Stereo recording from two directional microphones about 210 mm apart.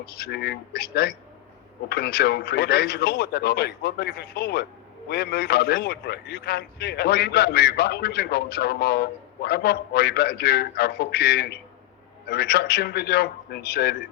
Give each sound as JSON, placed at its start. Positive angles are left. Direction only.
{"t": 0.0, "sound": "a man's voice", "side_deg": 50}